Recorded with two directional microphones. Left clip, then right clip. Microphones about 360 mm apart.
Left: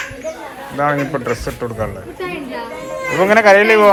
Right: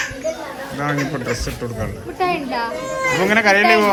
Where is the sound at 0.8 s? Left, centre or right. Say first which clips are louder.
Left 6 dB; centre.